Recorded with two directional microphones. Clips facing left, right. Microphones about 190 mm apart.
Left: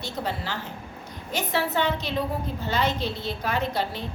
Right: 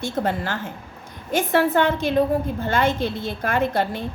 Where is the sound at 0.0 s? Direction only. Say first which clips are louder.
Right 7 dB; 50° right (ahead or behind).